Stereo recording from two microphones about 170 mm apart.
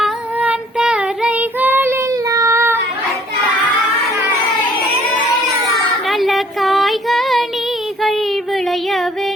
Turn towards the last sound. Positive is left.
turn(degrees=0)  # may be behind; listen again after turning